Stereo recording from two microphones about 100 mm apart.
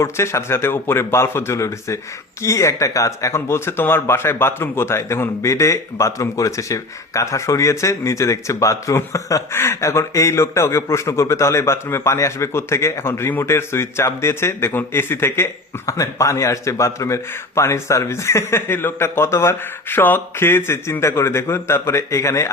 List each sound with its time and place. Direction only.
0.0 s speech: 30° left (ahead or behind)